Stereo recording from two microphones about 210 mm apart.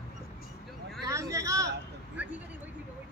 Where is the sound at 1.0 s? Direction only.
15° right (ahead or behind).